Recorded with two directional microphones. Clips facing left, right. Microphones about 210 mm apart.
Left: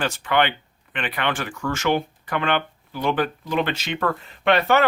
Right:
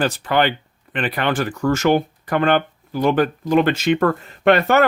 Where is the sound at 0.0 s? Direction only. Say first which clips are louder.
Right 3 dB; 35° right (ahead or behind).